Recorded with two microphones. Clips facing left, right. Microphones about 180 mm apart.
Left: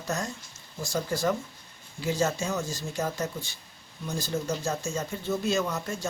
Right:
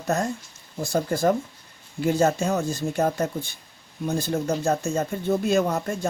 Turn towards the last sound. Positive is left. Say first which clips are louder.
# right 6 dB
turn(degrees=-55)  # may be behind; listen again after turning